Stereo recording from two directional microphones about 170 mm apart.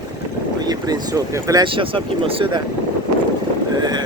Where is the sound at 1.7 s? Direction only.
30° right (ahead or behind).